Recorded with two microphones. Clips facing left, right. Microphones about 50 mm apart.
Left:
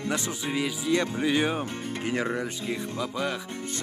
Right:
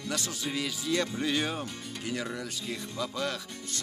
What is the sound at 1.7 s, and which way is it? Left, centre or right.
Speech, left.